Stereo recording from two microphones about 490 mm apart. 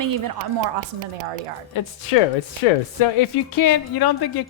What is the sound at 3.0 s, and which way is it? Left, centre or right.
Speech, left.